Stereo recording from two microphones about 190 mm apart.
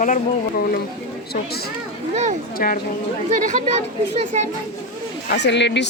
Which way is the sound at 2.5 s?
50° left (ahead or behind).